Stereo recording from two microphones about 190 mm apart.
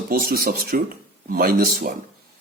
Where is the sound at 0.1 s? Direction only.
50° right (ahead or behind).